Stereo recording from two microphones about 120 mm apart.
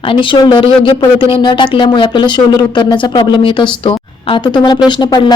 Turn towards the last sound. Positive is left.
turn(degrees=40)  # may be behind; listen again after turning